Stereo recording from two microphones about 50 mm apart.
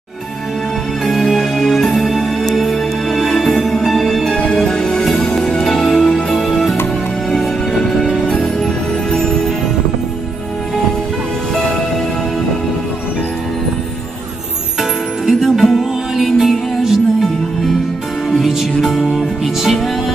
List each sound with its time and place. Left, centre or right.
1.0 s music: centre
4.3 s music: centre
9.1 s music: centre
14.8 s music: centre
18.5 s music: centre